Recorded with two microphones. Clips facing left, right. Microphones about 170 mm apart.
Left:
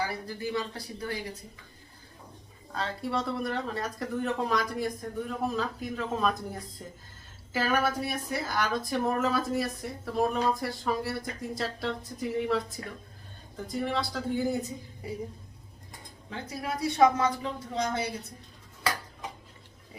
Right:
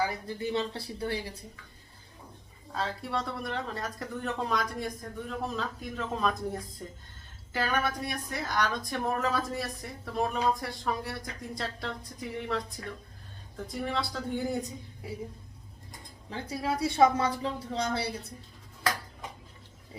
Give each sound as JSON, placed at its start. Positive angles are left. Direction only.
{"t": 0.1, "sound": "speech", "side_deg": -25}
{"t": 2.7, "sound": "a woman's voice", "side_deg": 0}
{"t": 16.3, "sound": "speech", "side_deg": -30}